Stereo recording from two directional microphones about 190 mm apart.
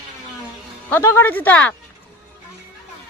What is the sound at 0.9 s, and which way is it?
Speech, 10° left (ahead or behind).